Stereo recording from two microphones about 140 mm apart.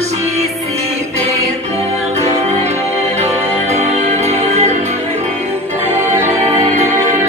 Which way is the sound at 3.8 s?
55° right (ahead or behind).